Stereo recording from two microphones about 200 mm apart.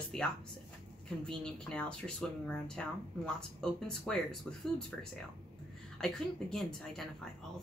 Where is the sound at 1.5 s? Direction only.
5° left (ahead or behind).